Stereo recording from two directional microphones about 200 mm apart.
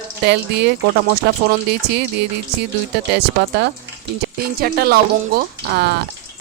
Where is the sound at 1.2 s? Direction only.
55° right (ahead or behind).